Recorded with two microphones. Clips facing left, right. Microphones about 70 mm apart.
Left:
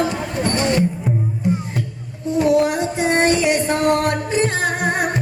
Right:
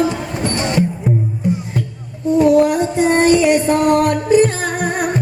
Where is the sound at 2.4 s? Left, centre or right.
Right.